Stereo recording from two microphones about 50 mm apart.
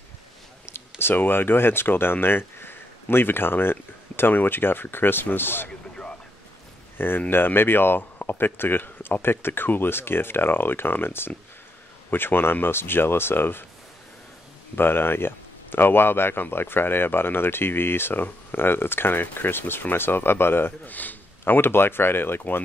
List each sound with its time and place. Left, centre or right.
0.7 s speech: left
7.0 s speech: left
14.8 s speech: left